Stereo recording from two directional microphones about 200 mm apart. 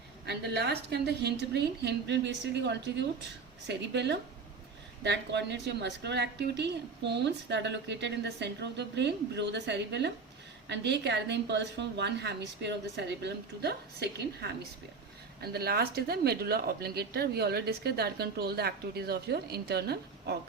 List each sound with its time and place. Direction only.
0.3 s a woman's voice: 55° right (ahead or behind)